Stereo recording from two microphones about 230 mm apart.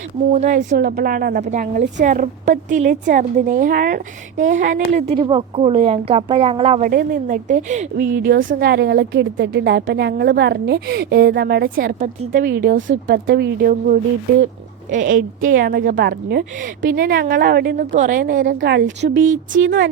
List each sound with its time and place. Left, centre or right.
0.3 s a woman's voice: right
18.6 s speech: right